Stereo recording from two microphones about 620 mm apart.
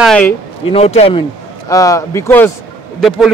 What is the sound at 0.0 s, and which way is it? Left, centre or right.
A man's voice, centre.